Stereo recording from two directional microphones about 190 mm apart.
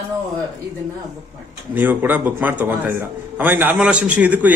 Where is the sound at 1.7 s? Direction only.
10° right (ahead or behind).